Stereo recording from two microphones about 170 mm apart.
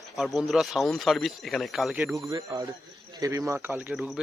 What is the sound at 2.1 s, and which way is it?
Speech, 20° right (ahead or behind).